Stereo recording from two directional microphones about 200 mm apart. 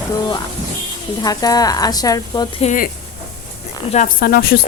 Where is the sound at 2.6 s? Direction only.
40° left (ahead or behind).